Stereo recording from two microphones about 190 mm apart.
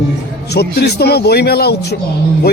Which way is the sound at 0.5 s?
60° left (ahead or behind).